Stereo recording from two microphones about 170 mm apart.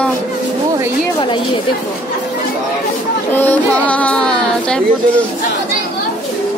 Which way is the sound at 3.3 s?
10° left (ahead or behind).